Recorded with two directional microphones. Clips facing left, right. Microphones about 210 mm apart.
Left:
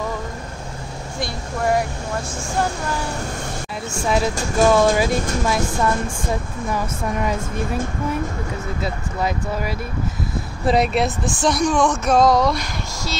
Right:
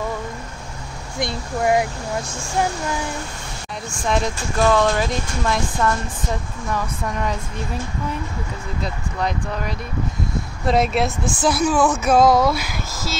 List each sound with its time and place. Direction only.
1.2 s speech: 20° right (ahead or behind)
4.0 s speech: 5° left (ahead or behind)
8.8 s speech: 5° left (ahead or behind)